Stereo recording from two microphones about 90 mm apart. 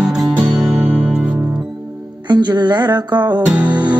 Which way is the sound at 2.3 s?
55° right (ahead or behind).